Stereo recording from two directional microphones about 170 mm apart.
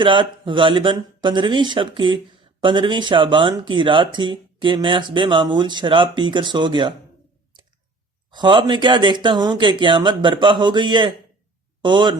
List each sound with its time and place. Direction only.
0.0 s speech: 30° right (ahead or behind)
8.3 s speech: 25° right (ahead or behind)